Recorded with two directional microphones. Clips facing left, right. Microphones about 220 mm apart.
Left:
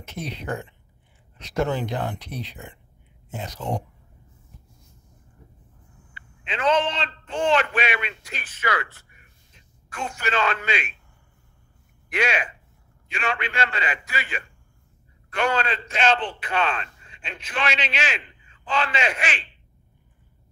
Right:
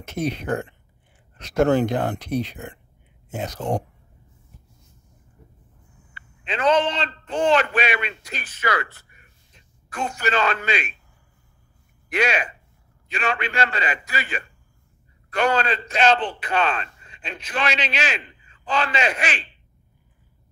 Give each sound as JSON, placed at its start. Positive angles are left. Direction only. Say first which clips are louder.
{"t": 0.0, "sound": "speech", "louder": "right 8 dB", "side_deg": -45}
{"t": 1.4, "sound": "speech", "louder": "right 7 dB", "side_deg": -50}
{"t": 6.4, "sound": "a man's voice", "louder": "right 2 dB", "side_deg": -40}
{"t": 12.1, "sound": "a man's voice", "louder": "right 2 dB", "side_deg": -40}